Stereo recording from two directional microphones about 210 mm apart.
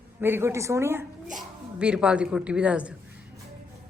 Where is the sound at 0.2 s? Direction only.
10° right (ahead or behind).